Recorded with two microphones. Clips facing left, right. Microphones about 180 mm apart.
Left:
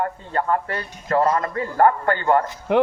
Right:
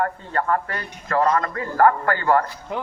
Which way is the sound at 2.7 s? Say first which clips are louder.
Left 12 dB; 70° left (ahead or behind).